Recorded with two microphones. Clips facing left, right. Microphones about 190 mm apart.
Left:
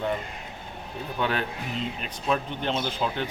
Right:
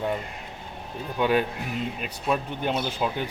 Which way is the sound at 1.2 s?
10° right (ahead or behind).